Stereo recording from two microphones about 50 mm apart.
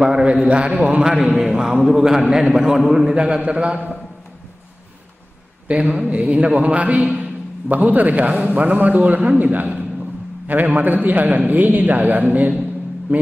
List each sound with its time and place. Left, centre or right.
0.0 s a man's voice: centre
1.4 s a man's voice: centre
3.4 s a man's voice: right
5.7 s a man's voice: right